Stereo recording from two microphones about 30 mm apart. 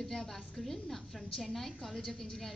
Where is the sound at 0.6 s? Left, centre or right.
Centre.